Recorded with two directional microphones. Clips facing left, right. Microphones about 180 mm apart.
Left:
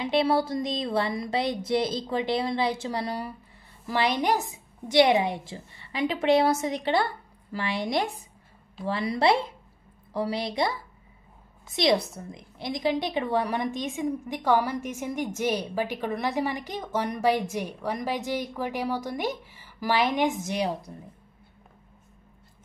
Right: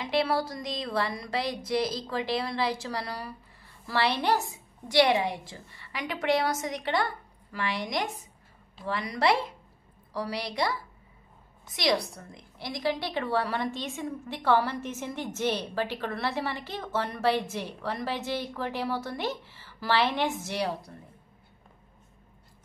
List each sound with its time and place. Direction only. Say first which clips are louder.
0.0 s a woman's voice: left 4 dB; 25° left (ahead or behind)